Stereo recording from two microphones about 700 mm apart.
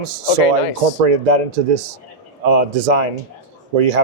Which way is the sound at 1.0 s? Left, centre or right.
Right.